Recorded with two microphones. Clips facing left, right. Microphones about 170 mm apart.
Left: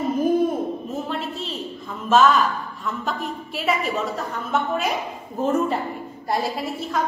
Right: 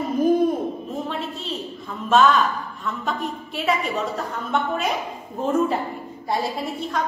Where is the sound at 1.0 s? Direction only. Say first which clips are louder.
Left 1 dB; centre (ahead or behind).